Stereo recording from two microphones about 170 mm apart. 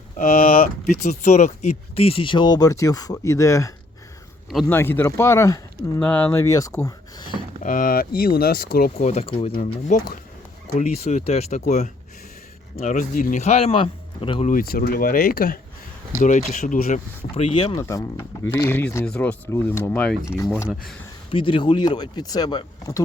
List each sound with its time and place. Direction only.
0.2 s speech: 55° left (ahead or behind); by 3.7 s 15° left (ahead or behind)
4.7 s speech: 10° left (ahead or behind)
7.6 s speech: 55° left (ahead or behind)
9.0 s a man's voice: 40° left (ahead or behind)
10.8 s a man's voice: 40° left (ahead or behind)
12.7 s a man's voice: 50° left (ahead or behind); by 14.5 s 30° left (ahead or behind)
14.5 s speech: 60° left (ahead or behind)
16.2 s speech: 45° left (ahead or behind)
17.3 s a man's voice: 35° left (ahead or behind)
17.7 s speech: 20° left (ahead or behind)
21.2 s speech: 30° left (ahead or behind)